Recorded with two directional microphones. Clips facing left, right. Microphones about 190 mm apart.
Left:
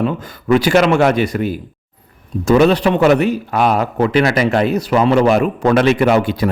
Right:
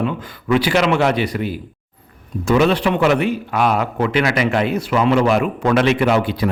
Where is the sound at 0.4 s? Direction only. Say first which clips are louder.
Left 4 dB; 45° left (ahead or behind).